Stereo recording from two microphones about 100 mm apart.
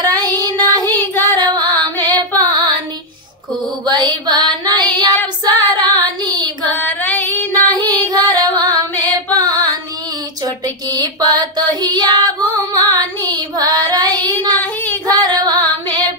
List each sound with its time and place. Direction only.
0.0 s child singing: 40° right (ahead or behind)
0.4 s music: 40° right (ahead or behind)
3.8 s female singing: 45° right (ahead or behind)
5.9 s child singing: 45° right (ahead or behind)
6.8 s female singing: 15° left (ahead or behind)
7.7 s music: 40° right (ahead or behind)
10.4 s child singing: 40° right (ahead or behind)
12.7 s female singing: 45° right (ahead or behind)
13.6 s child singing: 40° right (ahead or behind)
14.6 s child singing: 20° left (ahead or behind)
15.1 s female singing: 45° right (ahead or behind)